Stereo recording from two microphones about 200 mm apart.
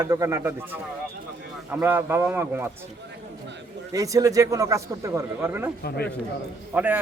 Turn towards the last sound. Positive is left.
turn(degrees=-10)  # may be behind; listen again after turning